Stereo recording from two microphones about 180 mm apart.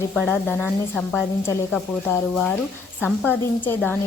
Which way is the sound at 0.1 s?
5° left (ahead or behind).